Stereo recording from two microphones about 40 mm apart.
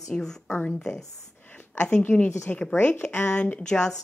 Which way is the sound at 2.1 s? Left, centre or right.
Left.